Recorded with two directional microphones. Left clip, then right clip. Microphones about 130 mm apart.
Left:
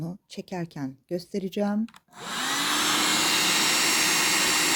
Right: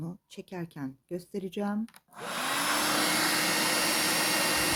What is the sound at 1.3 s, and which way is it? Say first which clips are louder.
Speech: left 5 dB; 30° left (ahead or behind).